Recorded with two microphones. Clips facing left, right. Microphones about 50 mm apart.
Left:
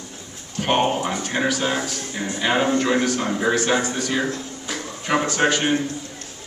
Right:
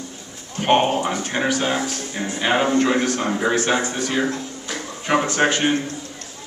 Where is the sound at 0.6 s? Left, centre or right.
Centre.